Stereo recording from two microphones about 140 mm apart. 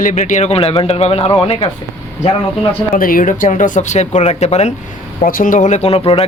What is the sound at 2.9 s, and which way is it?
Speech, 80° left.